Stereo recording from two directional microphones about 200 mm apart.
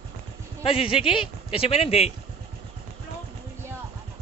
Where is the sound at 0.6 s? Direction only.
25° left (ahead or behind).